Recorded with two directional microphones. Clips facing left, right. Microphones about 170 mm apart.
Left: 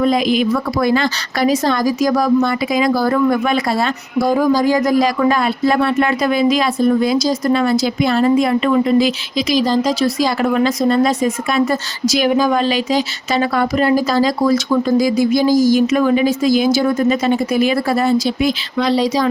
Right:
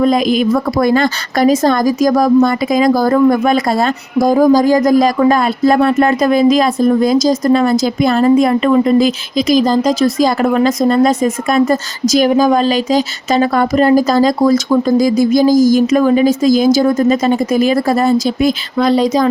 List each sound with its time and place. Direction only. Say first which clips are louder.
0.0 s a woman's voice: right 3 dB; 45° right (ahead or behind)